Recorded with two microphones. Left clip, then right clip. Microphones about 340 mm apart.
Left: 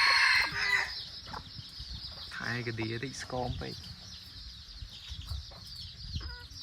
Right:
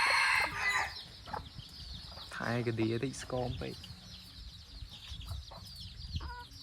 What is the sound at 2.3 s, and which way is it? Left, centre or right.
Speech, centre.